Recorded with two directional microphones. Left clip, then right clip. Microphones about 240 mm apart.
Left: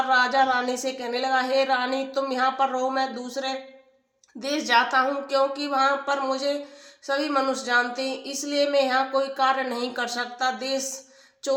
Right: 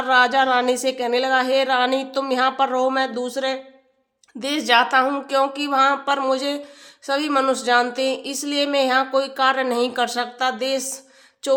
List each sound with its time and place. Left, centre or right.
0.1 s speech: right